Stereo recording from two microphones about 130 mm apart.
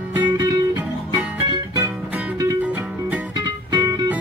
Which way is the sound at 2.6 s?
10° right (ahead or behind).